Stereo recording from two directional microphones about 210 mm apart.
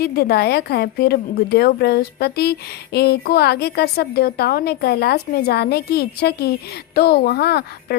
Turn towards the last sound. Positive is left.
turn(degrees=50)  # may be behind; listen again after turning